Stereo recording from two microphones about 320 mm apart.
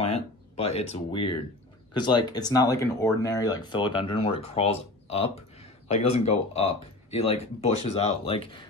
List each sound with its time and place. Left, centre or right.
0.0 s speech: centre